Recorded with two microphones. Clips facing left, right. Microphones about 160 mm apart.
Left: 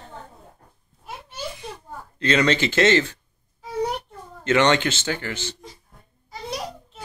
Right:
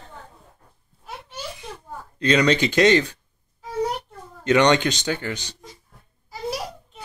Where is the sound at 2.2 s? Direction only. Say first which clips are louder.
Right 2 dB; 15° right (ahead or behind).